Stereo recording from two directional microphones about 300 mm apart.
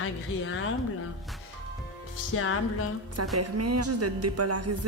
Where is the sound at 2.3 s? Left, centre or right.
Left.